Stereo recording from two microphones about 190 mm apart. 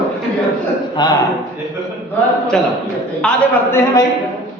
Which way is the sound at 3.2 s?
15° left (ahead or behind).